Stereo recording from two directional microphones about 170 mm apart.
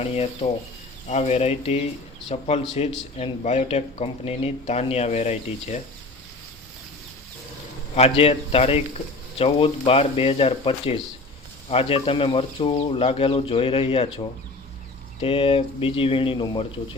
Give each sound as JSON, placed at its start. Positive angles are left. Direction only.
{"t": 0.0, "sound": "speech", "side_deg": 35}
{"t": 7.9, "sound": "speech", "side_deg": 35}